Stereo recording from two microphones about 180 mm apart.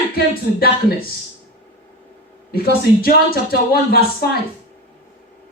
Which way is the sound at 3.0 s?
55° left (ahead or behind).